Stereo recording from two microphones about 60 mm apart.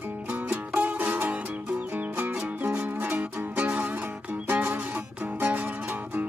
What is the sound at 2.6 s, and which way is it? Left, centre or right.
Music, right.